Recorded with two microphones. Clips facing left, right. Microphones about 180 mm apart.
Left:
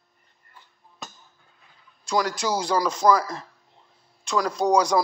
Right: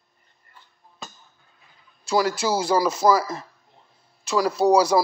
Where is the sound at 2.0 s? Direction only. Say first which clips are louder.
Right 3 dB; 5° right (ahead or behind).